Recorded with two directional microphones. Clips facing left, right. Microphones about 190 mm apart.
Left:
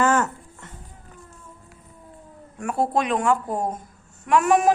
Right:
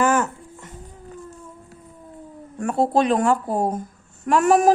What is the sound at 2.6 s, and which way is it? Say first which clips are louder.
A child's voice: right 4 dB; 30° right (ahead or behind).